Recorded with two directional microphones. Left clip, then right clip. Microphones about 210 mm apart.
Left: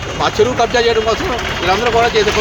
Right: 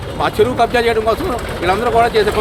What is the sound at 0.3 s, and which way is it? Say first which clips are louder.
Speech: even; 35° right (ahead or behind).